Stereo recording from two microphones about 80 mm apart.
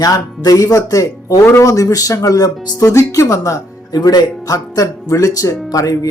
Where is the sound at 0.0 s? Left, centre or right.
Left.